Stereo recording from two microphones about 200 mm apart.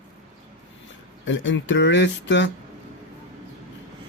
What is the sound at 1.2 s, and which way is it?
A man's voice, 70° left (ahead or behind).